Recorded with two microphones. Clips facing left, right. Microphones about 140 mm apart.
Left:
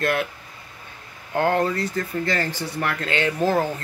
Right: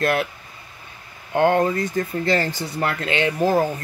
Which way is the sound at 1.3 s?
20° right (ahead or behind).